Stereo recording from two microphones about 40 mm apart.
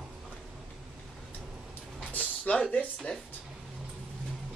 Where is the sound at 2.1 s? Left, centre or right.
Left.